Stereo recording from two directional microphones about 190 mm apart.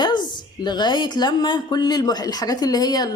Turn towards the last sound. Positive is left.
turn(degrees=20)  # may be behind; listen again after turning